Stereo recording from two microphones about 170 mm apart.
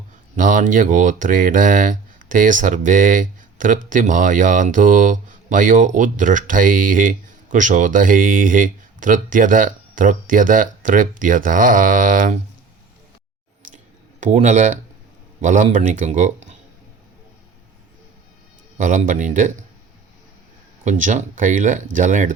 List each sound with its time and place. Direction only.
0.3 s speech: 50° right (ahead or behind)
14.2 s speech: 45° right (ahead or behind)
18.8 s speech: 50° right (ahead or behind)
20.8 s speech: 50° right (ahead or behind)